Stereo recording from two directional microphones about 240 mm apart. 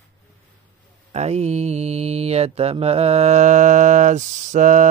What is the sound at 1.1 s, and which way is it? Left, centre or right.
Mantra, right.